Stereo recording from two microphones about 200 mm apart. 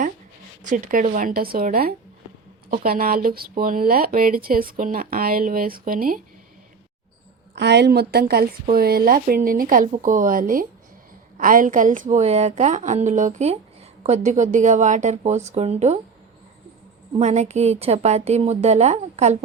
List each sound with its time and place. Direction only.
0.6 s speech: 40° right (ahead or behind)
7.5 s a woman's voice: 60° right (ahead or behind); by 16.0 s 30° right (ahead or behind)
17.2 s a woman's voice: 35° right (ahead or behind)